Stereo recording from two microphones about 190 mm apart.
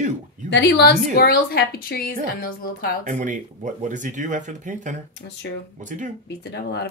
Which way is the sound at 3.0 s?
40° right (ahead or behind).